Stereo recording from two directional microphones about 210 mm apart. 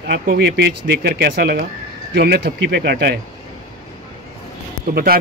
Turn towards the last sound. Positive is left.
turn(degrees=-45)  # may be behind; listen again after turning